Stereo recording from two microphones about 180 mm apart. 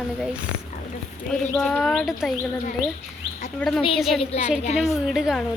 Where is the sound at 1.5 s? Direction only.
5° left (ahead or behind).